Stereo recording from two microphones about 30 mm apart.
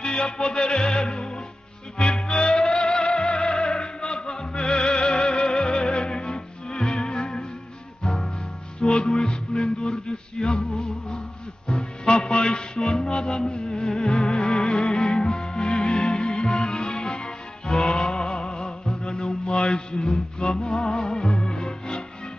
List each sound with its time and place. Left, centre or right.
0.0 s music: left
8.0 s music: centre
12.1 s music: left
12.8 s music: centre
19.0 s mantra: left
20.6 s music: left
21.3 s music: centre
21.5 s music: left